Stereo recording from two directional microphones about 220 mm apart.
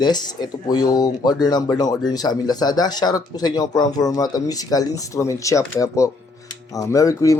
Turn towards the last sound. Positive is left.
turn(degrees=15)  # may be behind; listen again after turning